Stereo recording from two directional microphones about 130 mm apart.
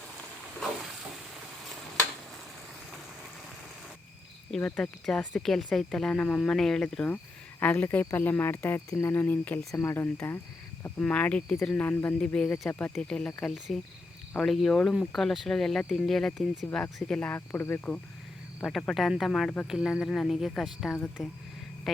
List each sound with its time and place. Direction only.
4.5 s speech: 5° left (ahead or behind)
7.6 s cricket: 10° left (ahead or behind)
12.9 s speech: 5° left (ahead or behind)
16.7 s cricket: 5° left (ahead or behind)
18.8 s speech: centre (ahead or behind)